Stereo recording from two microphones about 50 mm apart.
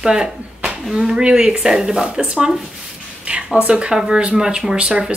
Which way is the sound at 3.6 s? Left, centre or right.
Right.